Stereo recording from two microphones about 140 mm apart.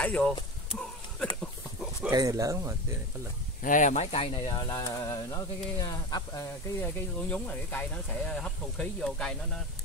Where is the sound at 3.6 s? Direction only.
65° left (ahead or behind); by 6.9 s 25° left (ahead or behind).